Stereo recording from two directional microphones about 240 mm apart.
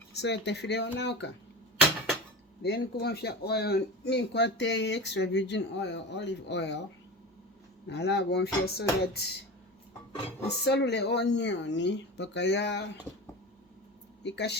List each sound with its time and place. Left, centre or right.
0.2 s speech: left
2.6 s speech: left
7.9 s speech: left
10.6 s speech: left
14.3 s speech: left